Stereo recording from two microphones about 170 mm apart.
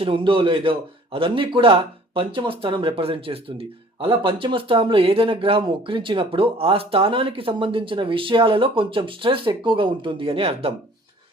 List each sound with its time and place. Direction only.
0.0 s speech: 30° right (ahead or behind)